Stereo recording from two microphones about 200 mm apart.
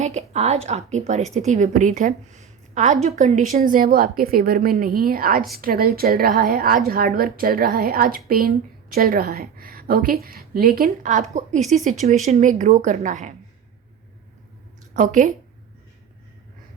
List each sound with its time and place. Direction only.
0.0 s a woman's voice: 35° right (ahead or behind)
14.9 s a woman's voice: 40° right (ahead or behind)